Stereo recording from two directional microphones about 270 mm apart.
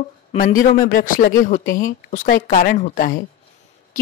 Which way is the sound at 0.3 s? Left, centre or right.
Left.